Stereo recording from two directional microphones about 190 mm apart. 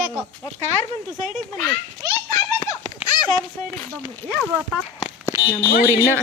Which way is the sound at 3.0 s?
20° left (ahead or behind).